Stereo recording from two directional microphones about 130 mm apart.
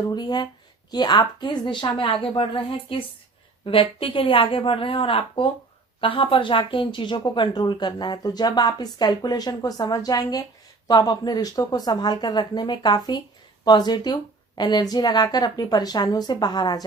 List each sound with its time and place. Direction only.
0.1 s speech: 35° left (ahead or behind)